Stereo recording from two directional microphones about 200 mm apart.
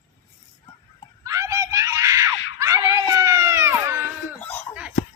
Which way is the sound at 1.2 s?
15° right (ahead or behind).